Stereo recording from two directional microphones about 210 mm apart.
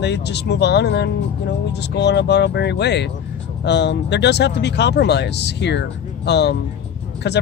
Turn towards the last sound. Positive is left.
turn(degrees=55)  # may be behind; listen again after turning